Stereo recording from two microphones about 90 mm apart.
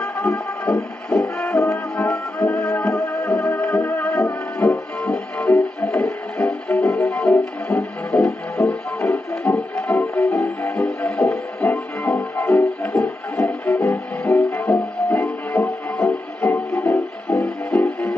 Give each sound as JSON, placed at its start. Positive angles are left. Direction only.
{"t": 0.0, "sound": "music", "side_deg": 10}
{"t": 2.9, "sound": "music", "side_deg": 35}
{"t": 4.6, "sound": "music", "side_deg": 15}